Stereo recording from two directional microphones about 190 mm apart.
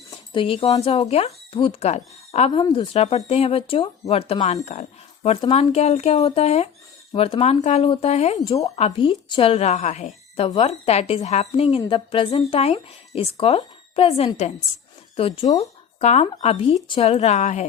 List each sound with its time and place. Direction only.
0.1 s speech: 30° left (ahead or behind)